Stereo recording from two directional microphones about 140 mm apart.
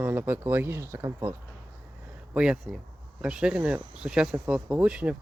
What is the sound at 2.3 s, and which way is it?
Speech, 5° right (ahead or behind).